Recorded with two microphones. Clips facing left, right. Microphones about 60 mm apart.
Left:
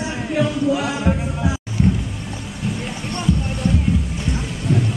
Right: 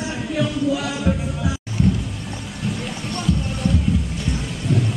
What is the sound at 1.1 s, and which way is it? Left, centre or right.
Music, left.